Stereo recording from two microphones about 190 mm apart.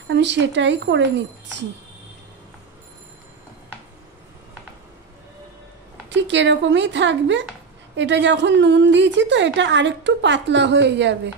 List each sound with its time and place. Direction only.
0.1 s a woman's voice: 65° right (ahead or behind)
6.0 s a woman's voice: 70° right (ahead or behind)